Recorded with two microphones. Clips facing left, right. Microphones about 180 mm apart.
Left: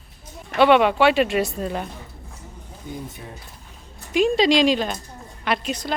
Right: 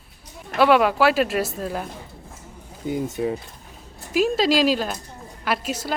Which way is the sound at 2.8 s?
80° right.